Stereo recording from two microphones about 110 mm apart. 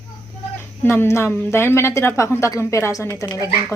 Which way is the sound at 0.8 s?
25° left (ahead or behind).